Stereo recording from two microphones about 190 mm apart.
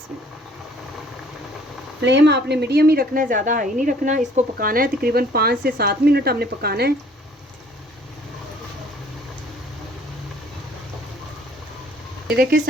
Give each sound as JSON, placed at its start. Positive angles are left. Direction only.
{"t": 2.0, "sound": "speech", "side_deg": -65}
{"t": 12.4, "sound": "speech", "side_deg": -50}